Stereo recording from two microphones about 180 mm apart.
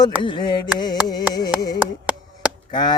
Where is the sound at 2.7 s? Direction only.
25° left (ahead or behind).